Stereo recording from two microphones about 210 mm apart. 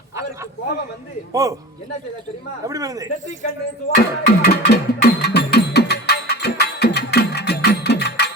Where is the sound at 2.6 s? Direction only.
15° right (ahead or behind).